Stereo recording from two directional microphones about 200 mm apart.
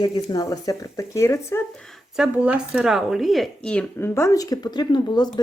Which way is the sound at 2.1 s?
5° right (ahead or behind).